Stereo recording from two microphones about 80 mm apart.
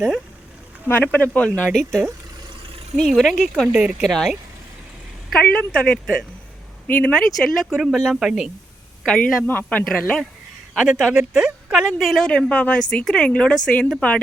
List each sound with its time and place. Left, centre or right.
0.9 s speech: left; by 4.4 s centre
5.4 s speech: centre
7.1 s speech: centre
9.5 s speech: left
10.8 s speech: centre
12.2 s speech: centre